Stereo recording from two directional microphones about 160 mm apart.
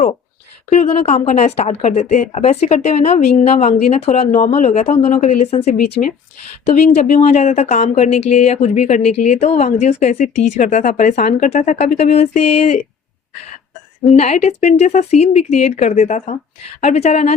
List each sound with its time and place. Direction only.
0.7 s speech: 40° left (ahead or behind)
4.3 s speech: 55° left (ahead or behind)
5.7 s speech: 65° left (ahead or behind)
6.7 s speech: 45° left (ahead or behind)
14.2 s speech: 45° left (ahead or behind)